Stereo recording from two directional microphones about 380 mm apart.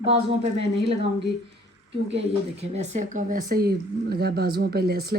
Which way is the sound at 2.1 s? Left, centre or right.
Centre.